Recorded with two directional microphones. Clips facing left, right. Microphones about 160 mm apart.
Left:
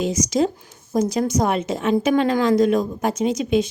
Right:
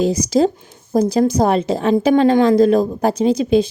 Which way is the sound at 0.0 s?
35° right (ahead or behind).